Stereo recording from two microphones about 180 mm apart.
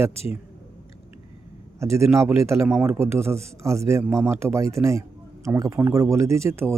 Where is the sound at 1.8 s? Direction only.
15° right (ahead or behind).